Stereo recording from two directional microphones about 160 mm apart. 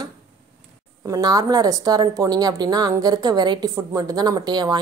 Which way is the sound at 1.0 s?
20° right (ahead or behind).